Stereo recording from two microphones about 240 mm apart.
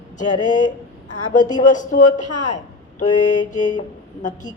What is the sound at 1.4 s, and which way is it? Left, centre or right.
Speech, centre.